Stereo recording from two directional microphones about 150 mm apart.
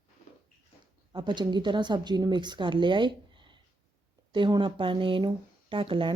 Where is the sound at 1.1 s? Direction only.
30° right (ahead or behind).